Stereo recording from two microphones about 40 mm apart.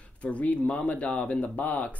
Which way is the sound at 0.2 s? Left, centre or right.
Left.